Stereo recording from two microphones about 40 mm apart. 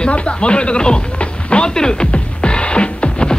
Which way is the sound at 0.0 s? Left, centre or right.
Left.